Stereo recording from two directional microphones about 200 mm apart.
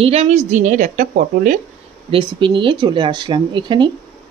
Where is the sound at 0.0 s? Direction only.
30° right (ahead or behind).